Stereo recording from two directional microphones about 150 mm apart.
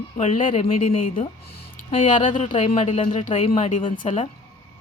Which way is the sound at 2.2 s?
55° left (ahead or behind).